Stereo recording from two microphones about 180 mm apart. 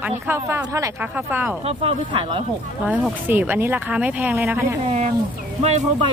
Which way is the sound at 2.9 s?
10° right (ahead or behind).